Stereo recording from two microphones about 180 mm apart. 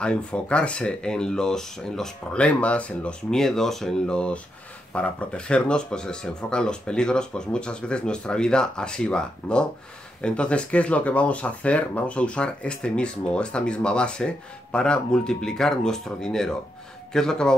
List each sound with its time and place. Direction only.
0.0 s speech: 5° left (ahead or behind)